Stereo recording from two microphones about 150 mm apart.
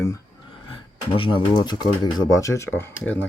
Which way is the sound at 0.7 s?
35° left (ahead or behind).